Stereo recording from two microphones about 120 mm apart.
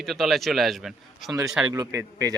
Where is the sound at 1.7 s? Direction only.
25° right (ahead or behind).